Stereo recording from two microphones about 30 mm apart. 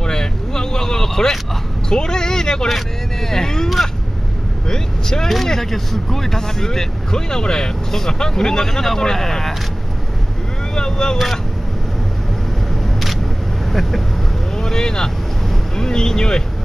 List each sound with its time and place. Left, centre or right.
0.0 s vehicle: left
1.9 s speech: left
5.5 s speech: centre
10.7 s speech: left
13.7 s speech: centre
14.6 s speech: left